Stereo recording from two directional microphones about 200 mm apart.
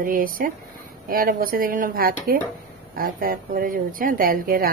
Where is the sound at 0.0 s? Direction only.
45° right (ahead or behind).